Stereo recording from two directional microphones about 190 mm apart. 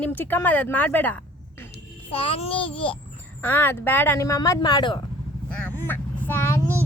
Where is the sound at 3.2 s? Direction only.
10° left (ahead or behind).